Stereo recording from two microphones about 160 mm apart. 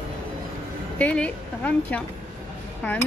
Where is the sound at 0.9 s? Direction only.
10° left (ahead or behind).